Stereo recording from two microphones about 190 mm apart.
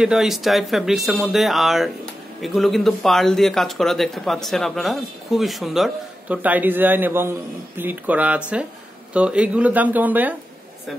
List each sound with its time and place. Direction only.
0.0 s speech: centre (ahead or behind)